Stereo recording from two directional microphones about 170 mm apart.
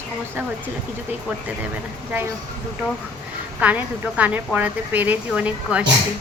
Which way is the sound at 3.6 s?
10° right (ahead or behind).